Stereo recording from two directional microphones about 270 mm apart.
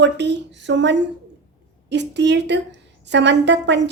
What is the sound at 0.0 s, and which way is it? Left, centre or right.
A woman's voice, right.